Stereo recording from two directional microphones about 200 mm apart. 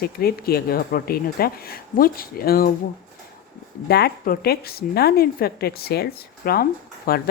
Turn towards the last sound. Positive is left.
turn(degrees=50)  # may be behind; listen again after turning